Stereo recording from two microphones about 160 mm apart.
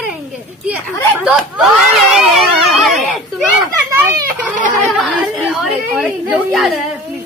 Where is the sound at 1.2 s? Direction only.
5° right (ahead or behind).